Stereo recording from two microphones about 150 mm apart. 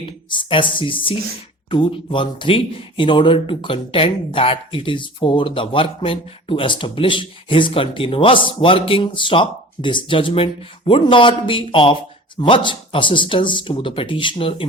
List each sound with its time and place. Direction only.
0.0 s speech: 35° left (ahead or behind)